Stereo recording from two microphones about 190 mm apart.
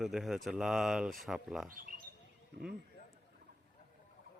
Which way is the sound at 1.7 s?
45° right (ahead or behind).